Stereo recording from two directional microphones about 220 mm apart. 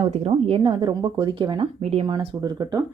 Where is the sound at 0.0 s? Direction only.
25° right (ahead or behind).